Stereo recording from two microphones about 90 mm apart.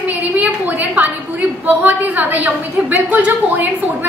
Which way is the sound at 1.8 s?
20° right (ahead or behind).